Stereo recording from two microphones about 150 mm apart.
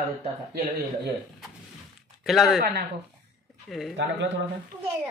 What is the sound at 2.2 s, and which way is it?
Speech, centre (ahead or behind).